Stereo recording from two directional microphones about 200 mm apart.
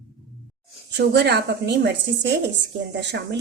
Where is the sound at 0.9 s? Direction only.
55° right (ahead or behind).